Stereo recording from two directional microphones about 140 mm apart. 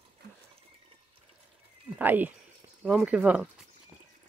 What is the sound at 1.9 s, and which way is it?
Speech, 15° right (ahead or behind).